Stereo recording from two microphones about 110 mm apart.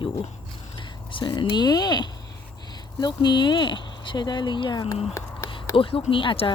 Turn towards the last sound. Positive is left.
turn(degrees=55)  # may be behind; listen again after turning